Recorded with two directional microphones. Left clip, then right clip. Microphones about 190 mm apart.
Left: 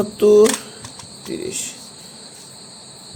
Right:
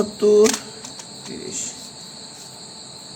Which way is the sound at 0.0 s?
35° left (ahead or behind).